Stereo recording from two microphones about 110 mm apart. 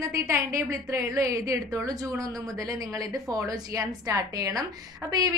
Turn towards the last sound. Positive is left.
turn(degrees=-30)  # may be behind; listen again after turning